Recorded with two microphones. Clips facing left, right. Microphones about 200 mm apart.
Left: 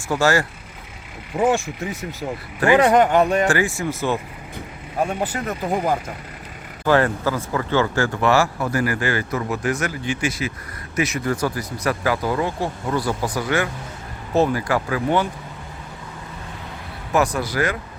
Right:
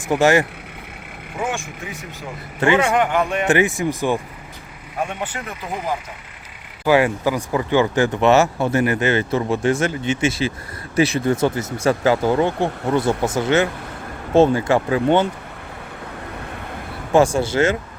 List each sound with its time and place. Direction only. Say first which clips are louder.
0.1 s speech: right 3 dB; 20° right (ahead or behind)
1.4 s speech: left 7 dB; 35° left (ahead or behind)
2.7 s speech: left 5 dB; 40° left (ahead or behind)
3.4 s speech: right 3 dB; 20° right (ahead or behind)
5.0 s speech: left 4 dB; 40° left (ahead or behind)
6.8 s speech: right 2 dB; 10° right (ahead or behind)
17.1 s speech: right 5 dB; 30° right (ahead or behind)